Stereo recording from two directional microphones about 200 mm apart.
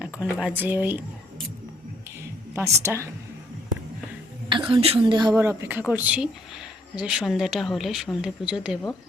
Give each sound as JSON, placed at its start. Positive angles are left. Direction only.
{"t": 0.4, "sound": "a woman's voice", "side_deg": -10}
{"t": 2.6, "sound": "a woman's voice", "side_deg": -15}
{"t": 4.4, "sound": "a woman's voice", "side_deg": -25}